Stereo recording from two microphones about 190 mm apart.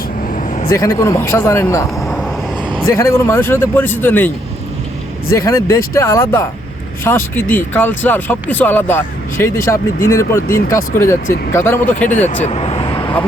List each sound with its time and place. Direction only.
0.3 s vehicle: 40° left (ahead or behind)
0.7 s speech: 15° left (ahead or behind)
5.3 s speech: 15° left (ahead or behind)
12.0 s speech: 40° left (ahead or behind); by 13.1 s 25° left (ahead or behind)